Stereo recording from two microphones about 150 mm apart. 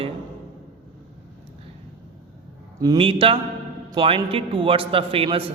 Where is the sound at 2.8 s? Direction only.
30° right (ahead or behind).